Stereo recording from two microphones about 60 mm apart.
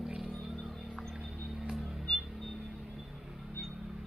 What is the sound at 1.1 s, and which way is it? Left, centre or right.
Music, centre.